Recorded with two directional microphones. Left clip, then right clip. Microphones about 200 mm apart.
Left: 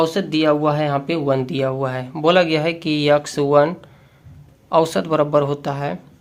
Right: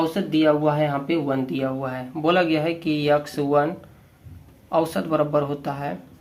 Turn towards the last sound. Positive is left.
turn(degrees=40)  # may be behind; listen again after turning